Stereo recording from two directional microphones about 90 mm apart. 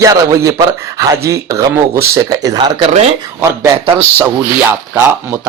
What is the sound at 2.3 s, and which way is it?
Speech, 50° right (ahead or behind).